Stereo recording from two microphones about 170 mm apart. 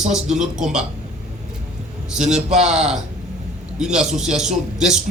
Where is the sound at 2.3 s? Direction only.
40° right (ahead or behind).